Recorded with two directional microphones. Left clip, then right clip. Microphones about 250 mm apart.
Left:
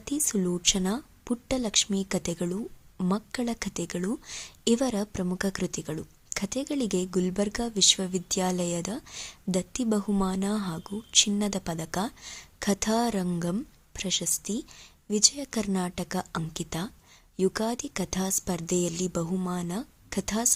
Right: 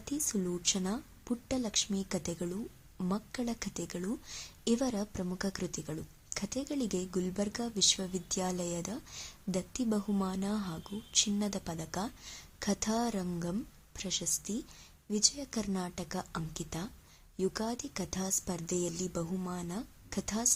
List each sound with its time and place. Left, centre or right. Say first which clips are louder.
0.0 s a woman's voice: left 7 dB; left